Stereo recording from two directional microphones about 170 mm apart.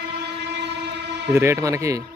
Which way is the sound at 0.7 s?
90° right.